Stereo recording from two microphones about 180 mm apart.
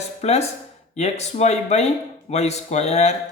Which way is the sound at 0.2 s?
35° left (ahead or behind).